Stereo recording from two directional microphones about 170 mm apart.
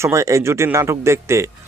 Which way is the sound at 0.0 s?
15° right (ahead or behind).